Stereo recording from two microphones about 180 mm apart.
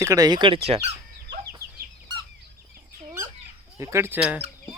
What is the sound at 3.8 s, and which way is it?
Speech, 15° right (ahead or behind).